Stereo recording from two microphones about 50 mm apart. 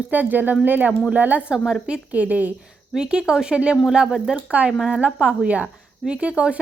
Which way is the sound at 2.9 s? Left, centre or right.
Centre.